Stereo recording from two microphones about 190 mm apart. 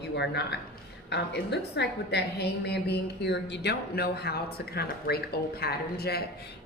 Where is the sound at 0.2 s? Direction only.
60° left (ahead or behind).